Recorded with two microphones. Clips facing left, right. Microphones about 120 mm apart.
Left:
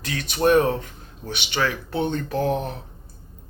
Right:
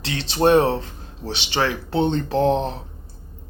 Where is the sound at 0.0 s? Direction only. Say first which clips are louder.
Right 3 dB; 30° right (ahead or behind).